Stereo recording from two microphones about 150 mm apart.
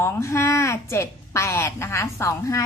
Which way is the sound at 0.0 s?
20° left (ahead or behind).